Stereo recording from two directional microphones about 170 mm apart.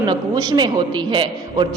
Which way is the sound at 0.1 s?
25° right (ahead or behind).